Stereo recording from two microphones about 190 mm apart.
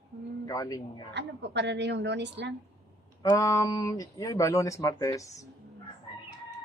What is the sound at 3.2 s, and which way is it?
Speech, 20° left (ahead or behind).